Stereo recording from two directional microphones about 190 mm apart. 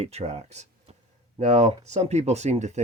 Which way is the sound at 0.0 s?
35° right (ahead or behind).